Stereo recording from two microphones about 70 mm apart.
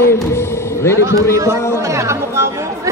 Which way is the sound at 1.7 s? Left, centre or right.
Right.